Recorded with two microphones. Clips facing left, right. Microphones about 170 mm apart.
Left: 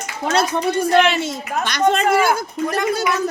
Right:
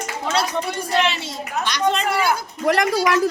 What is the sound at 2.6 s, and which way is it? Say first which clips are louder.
Speech: right 2 dB; 80° right.